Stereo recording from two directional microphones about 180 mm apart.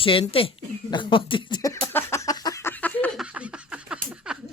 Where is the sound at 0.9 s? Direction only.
25° left (ahead or behind); by 3.2 s 10° left (ahead or behind).